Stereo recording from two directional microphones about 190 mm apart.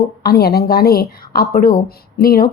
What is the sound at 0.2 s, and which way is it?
A woman's voice, 55° left (ahead or behind).